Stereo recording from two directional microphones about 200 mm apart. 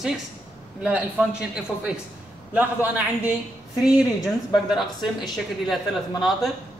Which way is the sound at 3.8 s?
20° left (ahead or behind).